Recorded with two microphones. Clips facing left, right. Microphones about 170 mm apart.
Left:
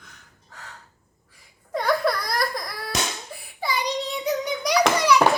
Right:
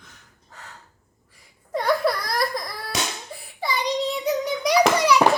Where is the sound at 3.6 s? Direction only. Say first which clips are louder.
Right 2 dB; centre (ahead or behind).